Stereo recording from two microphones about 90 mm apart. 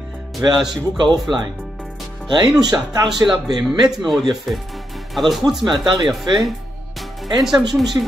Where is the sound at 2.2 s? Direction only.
55° right (ahead or behind).